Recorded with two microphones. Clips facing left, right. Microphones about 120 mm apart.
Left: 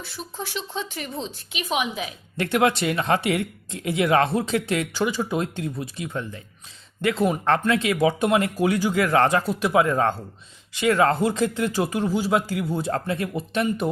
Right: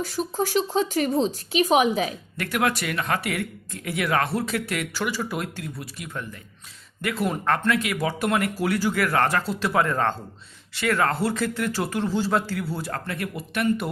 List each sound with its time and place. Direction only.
0.0 s speech: 45° right (ahead or behind)
2.4 s speech: 25° left (ahead or behind)